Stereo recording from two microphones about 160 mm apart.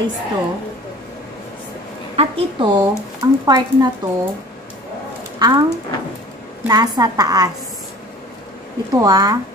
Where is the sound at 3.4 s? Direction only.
25° right (ahead or behind).